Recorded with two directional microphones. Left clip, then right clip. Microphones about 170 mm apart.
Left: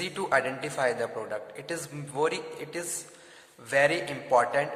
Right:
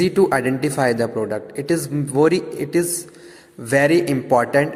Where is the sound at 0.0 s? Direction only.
40° right (ahead or behind).